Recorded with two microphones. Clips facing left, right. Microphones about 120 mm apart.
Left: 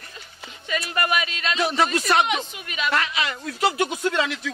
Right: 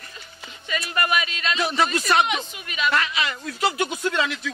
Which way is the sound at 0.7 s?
50° left (ahead or behind).